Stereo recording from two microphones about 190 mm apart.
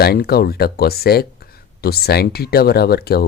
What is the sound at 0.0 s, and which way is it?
Speech, 55° left (ahead or behind).